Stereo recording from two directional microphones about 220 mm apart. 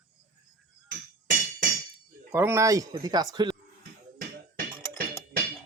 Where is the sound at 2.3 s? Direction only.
10° right (ahead or behind).